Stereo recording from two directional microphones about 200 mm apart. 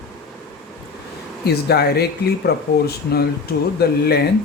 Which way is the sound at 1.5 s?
55° left (ahead or behind).